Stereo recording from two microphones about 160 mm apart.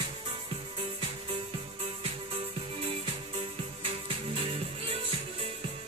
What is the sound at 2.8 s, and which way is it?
Music, 35° right (ahead or behind).